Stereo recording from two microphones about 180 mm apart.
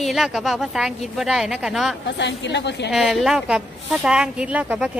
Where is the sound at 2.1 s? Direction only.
75° left (ahead or behind).